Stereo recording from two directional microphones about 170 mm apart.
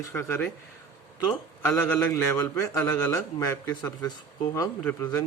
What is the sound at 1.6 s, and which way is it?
A man's voice, 10° left (ahead or behind).